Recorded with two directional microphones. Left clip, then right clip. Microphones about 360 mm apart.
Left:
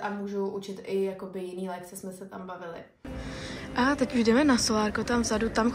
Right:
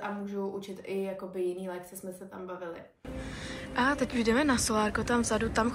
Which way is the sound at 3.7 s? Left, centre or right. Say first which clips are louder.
Left 2 dB; centre.